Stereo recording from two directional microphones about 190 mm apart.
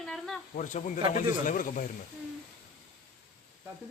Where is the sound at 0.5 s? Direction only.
40° left (ahead or behind).